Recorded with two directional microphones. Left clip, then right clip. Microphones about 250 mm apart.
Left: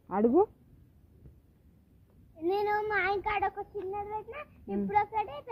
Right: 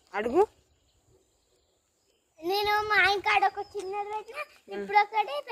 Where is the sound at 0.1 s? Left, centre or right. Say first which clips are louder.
Even; centre.